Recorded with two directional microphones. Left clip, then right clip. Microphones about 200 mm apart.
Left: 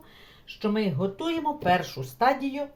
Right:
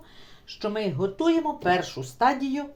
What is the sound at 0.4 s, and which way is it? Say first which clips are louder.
Speech: even; 30° right (ahead or behind).